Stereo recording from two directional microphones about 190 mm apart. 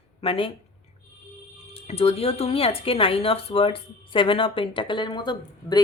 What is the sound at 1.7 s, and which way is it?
Speech, 30° left (ahead or behind).